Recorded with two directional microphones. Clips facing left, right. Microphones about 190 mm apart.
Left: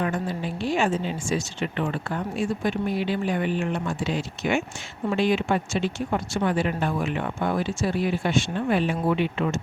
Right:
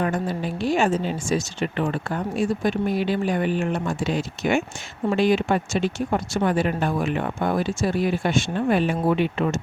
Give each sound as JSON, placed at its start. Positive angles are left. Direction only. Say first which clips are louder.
{"t": 0.0, "sound": "speech", "louder": "right 2 dB", "side_deg": -40}